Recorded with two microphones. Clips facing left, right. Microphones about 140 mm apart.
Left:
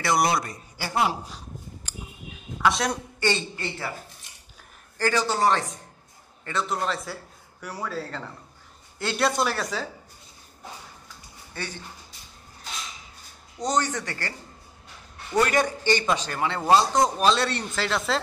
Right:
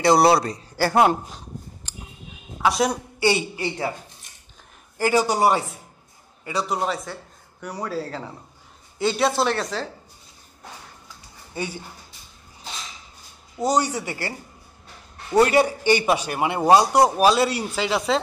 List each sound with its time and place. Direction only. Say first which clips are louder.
0.0 s a man's voice: right 7 dB; 30° right (ahead or behind)
0.7 s speech: right 7 dB; 50° right (ahead or behind)
1.2 s a sound: right 2 dB; centre (ahead or behind)
2.6 s speech: right 3 dB; centre (ahead or behind)
3.2 s a woman's voice: right 7 dB; 10° right (ahead or behind); by 9.8 s 5° left (ahead or behind)
11.5 s speech: right 6 dB; 10° right (ahead or behind)
13.6 s a man's voice: right 4 dB; 10° right (ahead or behind)
15.5 s a man's voice: right 5 dB; 10° right (ahead or behind)